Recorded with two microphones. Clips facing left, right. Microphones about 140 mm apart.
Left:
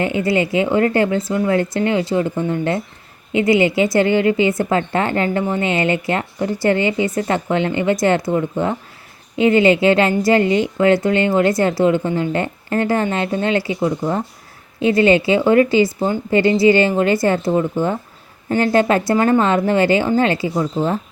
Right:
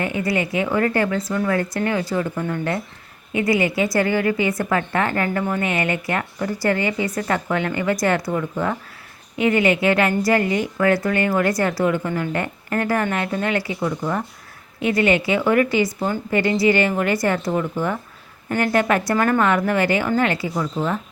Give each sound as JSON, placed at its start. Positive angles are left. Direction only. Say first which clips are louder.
{"t": 0.0, "sound": "a woman's voice", "louder": "left 5 dB", "side_deg": 25}